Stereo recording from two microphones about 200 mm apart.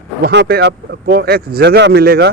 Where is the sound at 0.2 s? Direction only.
55° right (ahead or behind).